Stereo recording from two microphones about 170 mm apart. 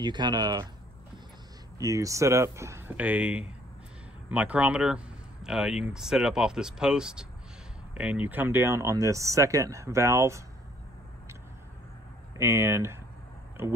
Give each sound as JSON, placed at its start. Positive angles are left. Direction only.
{"t": 0.0, "sound": "speech", "side_deg": -25}
{"t": 1.8, "sound": "speech", "side_deg": -20}
{"t": 12.4, "sound": "speech", "side_deg": -15}